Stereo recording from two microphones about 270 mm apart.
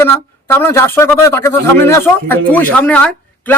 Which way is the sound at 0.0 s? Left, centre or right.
Centre.